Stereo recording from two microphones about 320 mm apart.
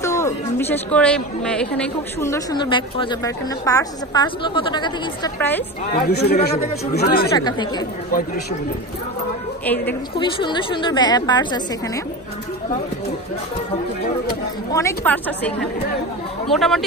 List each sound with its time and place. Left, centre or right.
0.0 s a woman's voice: centre
5.9 s speech: left
7.3 s a woman's voice: centre
9.7 s a woman's voice: centre
14.7 s a woman's voice: centre